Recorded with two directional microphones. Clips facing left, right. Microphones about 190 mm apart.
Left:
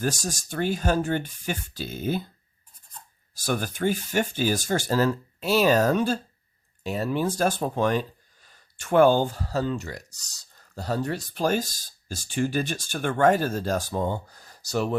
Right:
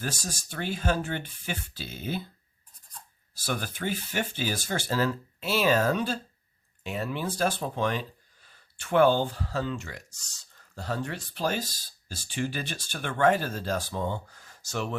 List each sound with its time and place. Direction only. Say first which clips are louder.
0.0 s speech: left 7 dB; 45° left (ahead or behind)
3.3 s speech: left 5 dB; 45° left (ahead or behind)